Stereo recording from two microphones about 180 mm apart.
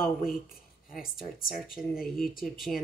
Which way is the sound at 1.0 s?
55° left (ahead or behind).